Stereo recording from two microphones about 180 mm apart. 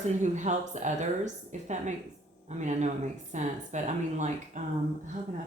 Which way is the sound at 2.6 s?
40° right (ahead or behind).